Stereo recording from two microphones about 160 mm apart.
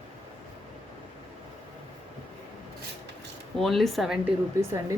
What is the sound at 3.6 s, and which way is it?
Speech, centre (ahead or behind).